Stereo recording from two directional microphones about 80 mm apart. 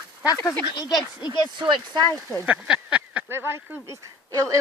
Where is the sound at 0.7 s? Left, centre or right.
Left.